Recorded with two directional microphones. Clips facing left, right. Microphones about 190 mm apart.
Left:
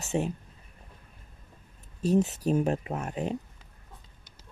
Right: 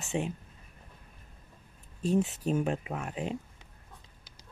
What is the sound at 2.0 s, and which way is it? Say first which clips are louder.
Speech: left 3 dB; 40° left (ahead or behind).